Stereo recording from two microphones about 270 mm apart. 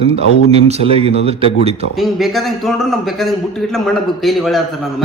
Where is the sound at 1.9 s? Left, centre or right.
Centre.